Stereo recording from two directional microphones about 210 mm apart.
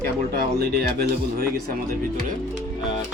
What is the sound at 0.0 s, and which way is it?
Speech, 45° right (ahead or behind).